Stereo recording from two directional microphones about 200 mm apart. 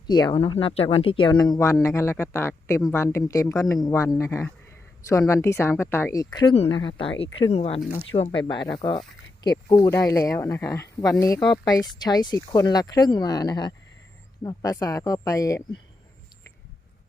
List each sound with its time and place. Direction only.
0.1 s speech: 20° left (ahead or behind)